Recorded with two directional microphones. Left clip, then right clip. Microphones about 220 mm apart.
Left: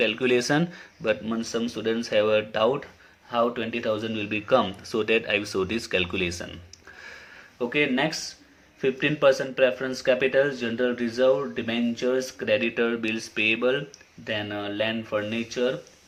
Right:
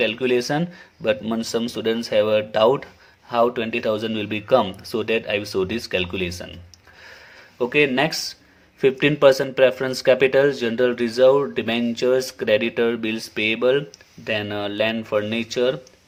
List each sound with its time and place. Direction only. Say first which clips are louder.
0.0 s speech: right 2 dB; 20° right (ahead or behind)
1.0 s speech: right 4 dB; 25° right (ahead or behind)
7.6 s speech: right 6 dB; 35° right (ahead or behind)